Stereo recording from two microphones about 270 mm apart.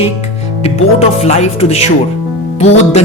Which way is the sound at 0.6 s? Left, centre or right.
Left.